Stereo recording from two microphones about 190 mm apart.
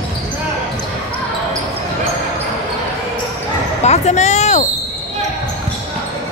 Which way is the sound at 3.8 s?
35° left (ahead or behind).